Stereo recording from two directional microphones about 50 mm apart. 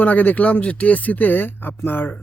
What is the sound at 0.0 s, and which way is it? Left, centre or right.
Speech, left.